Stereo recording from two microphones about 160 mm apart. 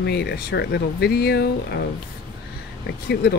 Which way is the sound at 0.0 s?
90° left.